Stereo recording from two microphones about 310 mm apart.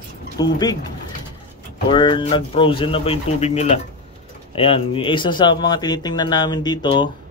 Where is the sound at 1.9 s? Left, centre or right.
Centre.